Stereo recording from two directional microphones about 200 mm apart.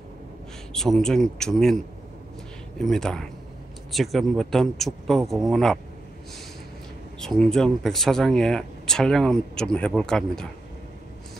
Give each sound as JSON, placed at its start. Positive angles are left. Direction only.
{"t": 0.7, "sound": "speech", "side_deg": 0}
{"t": 2.8, "sound": "speech", "side_deg": 0}
{"t": 7.2, "sound": "speech", "side_deg": 5}